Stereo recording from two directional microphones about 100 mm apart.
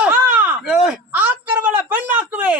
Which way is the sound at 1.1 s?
20° right (ahead or behind).